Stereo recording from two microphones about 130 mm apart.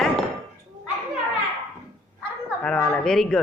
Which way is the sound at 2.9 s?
5° left (ahead or behind).